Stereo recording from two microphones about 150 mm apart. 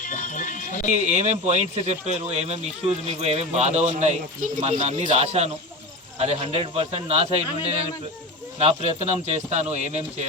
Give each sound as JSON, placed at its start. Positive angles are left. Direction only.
{"t": 0.0, "sound": "music", "side_deg": 60}
{"t": 1.1, "sound": "speech", "side_deg": -50}
{"t": 8.5, "sound": "speech", "side_deg": -45}